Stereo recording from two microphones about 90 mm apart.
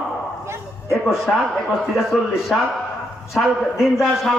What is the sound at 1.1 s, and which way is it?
A man's voice, 5° right (ahead or behind).